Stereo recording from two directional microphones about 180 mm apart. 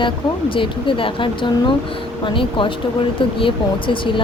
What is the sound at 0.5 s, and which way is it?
A child's voice, 30° left (ahead or behind).